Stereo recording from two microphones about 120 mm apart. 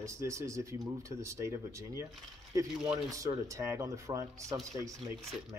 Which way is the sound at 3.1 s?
25° right (ahead or behind).